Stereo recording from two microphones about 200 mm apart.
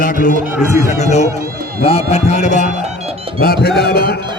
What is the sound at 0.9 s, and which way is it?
Music, 35° left (ahead or behind).